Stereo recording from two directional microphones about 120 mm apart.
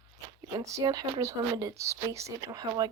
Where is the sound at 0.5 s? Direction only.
25° right (ahead or behind).